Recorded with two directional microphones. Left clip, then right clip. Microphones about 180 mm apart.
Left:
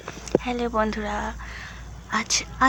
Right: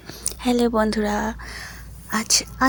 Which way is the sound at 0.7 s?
45° right (ahead or behind).